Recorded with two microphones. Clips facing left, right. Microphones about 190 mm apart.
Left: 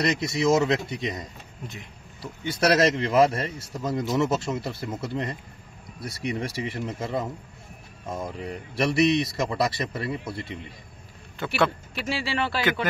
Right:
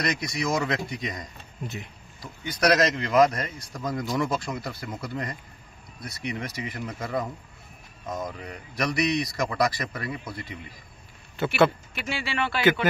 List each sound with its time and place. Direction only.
0.0 s a man's voice: 25° left (ahead or behind)
2.4 s a man's voice: 25° left (ahead or behind)
8.4 s a man's voice: 30° left (ahead or behind)
11.4 s speech: 5° right (ahead or behind)
11.9 s speech: 35° left (ahead or behind)